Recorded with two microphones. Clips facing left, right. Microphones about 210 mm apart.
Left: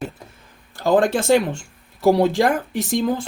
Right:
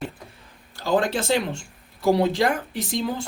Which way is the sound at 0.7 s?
50° left (ahead or behind).